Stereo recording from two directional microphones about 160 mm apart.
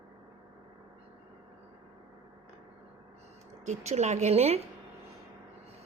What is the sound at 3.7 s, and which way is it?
Speech, 45° right (ahead or behind).